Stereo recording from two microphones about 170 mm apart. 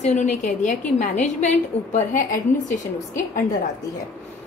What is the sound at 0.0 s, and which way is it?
A woman's voice, 45° left (ahead or behind).